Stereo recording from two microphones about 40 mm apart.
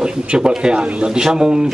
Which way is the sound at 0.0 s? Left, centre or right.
Right.